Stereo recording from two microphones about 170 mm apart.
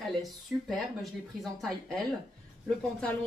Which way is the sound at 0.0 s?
Centre (ahead or behind).